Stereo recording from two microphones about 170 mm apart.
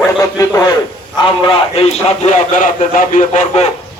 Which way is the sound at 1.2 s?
30° left (ahead or behind).